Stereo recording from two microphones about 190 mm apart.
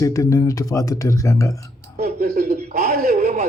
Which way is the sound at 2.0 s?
55° right (ahead or behind).